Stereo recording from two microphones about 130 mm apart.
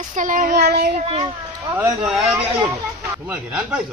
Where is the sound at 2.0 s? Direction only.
5° right (ahead or behind).